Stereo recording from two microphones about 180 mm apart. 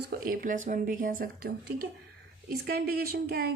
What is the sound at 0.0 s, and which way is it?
A woman's voice, 55° right (ahead or behind).